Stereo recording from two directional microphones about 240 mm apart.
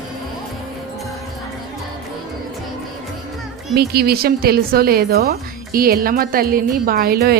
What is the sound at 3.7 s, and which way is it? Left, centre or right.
A woman's voice, right.